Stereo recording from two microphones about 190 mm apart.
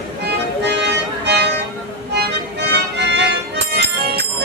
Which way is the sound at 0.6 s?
60° right (ahead or behind).